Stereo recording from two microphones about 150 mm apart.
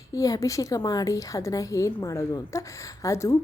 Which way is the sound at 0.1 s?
20° left (ahead or behind).